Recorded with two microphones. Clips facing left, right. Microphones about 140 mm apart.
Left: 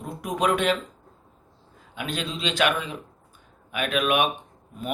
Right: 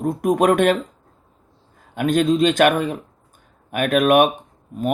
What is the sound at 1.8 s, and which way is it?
Speech, 50° right (ahead or behind).